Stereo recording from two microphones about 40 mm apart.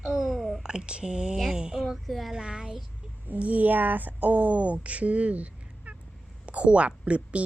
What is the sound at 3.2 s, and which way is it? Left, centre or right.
A woman's voice, right.